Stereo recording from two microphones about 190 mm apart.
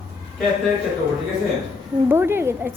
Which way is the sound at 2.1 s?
10° right (ahead or behind).